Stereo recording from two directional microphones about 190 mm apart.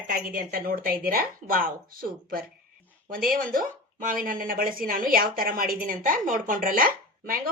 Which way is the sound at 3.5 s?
45° right (ahead or behind).